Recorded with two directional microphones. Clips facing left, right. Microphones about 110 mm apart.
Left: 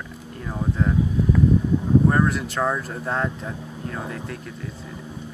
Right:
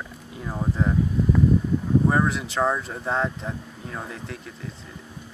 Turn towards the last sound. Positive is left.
turn(degrees=0)  # may be behind; listen again after turning